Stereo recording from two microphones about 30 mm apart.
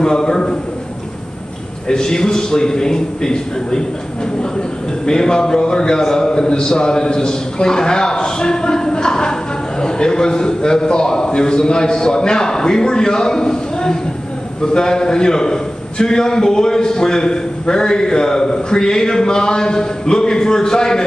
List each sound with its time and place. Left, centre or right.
0.0 s a sound: left
1.9 s a man's voice: left
5.0 s a man's voice: left